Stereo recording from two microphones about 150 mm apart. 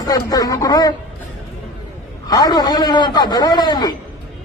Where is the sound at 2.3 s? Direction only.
25° left (ahead or behind).